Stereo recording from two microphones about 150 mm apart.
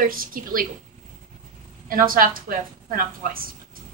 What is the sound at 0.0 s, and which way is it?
Speech, 70° right (ahead or behind).